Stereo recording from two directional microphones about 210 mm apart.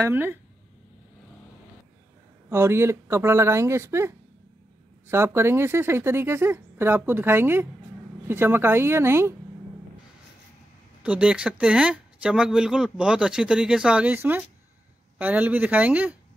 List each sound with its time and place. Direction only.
0.0 s speech: 10° right (ahead or behind)
2.5 s speech: 10° right (ahead or behind)
11.1 s speech: 5° right (ahead or behind)